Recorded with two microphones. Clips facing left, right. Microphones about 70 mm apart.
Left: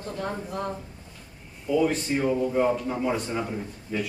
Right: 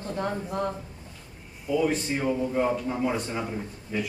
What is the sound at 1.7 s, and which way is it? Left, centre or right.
A man's voice, centre.